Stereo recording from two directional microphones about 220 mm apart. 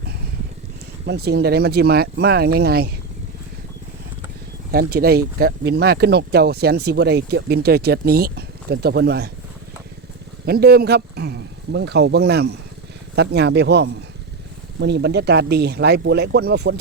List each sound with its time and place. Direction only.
1.0 s speech: 45° right (ahead or behind)
4.7 s speech: 40° right (ahead or behind)
10.4 s speech: 45° right (ahead or behind)